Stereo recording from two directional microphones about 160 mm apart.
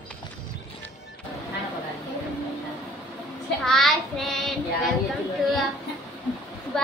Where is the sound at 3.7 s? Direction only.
Centre (ahead or behind).